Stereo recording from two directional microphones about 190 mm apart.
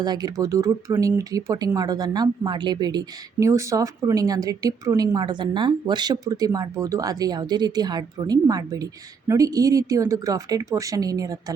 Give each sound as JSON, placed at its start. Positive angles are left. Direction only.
{"t": 0.0, "sound": "a woman's voice", "side_deg": -20}